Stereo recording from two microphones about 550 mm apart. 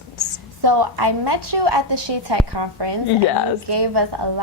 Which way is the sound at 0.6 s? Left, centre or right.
Right.